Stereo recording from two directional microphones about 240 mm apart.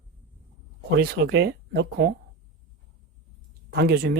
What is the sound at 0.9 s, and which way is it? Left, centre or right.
Speech, right.